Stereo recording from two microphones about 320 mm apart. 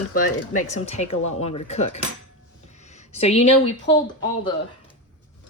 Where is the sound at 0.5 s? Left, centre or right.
Left.